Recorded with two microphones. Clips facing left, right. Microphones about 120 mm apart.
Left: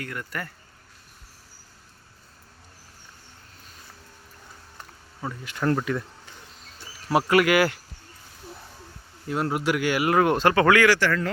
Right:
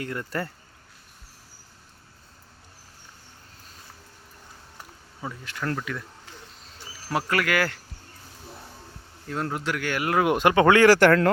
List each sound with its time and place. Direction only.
0.0 s speech: 25° right (ahead or behind)
4.8 s a sound: centre (ahead or behind)
5.5 s speech: 30° left (ahead or behind)
7.1 s speech: 15° left (ahead or behind)
9.2 s speech: 10° left (ahead or behind)
10.2 s speech: 10° right (ahead or behind)
10.8 s speech: 40° right (ahead or behind)